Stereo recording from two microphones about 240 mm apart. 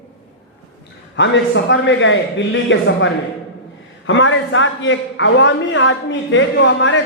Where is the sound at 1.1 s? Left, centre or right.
Left.